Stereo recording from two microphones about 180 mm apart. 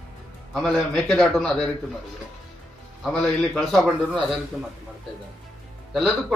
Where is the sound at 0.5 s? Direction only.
Centre (ahead or behind).